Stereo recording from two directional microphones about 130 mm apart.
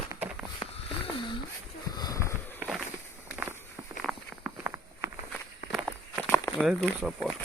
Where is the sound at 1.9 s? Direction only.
30° left (ahead or behind).